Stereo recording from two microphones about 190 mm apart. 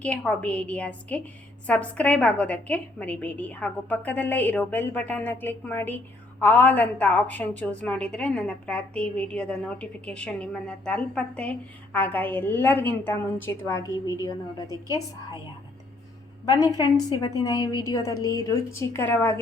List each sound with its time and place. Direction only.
0.0 s a woman's voice: 5° left (ahead or behind)
16.5 s a woman's voice: 20° left (ahead or behind)